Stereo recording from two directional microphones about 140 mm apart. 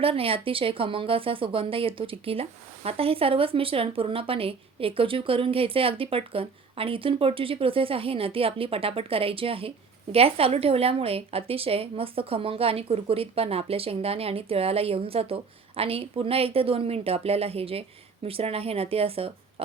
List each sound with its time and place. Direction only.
0.0 s speech: 40° right (ahead or behind)